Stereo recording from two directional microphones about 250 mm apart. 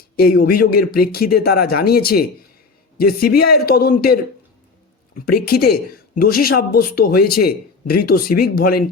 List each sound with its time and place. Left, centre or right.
0.2 s speech: left
5.2 s speech: left